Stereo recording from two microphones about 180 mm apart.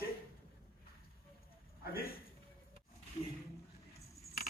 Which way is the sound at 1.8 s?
55° left (ahead or behind).